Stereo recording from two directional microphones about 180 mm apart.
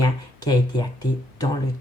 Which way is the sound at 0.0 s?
20° left (ahead or behind).